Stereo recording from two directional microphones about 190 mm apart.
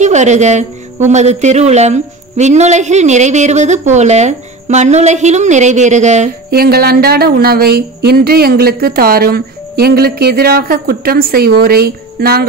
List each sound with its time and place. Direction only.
0.0 s speech: 40° right (ahead or behind)
6.5 s speech: 55° right (ahead or behind)